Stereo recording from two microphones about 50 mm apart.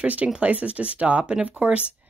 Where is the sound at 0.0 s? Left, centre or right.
Right.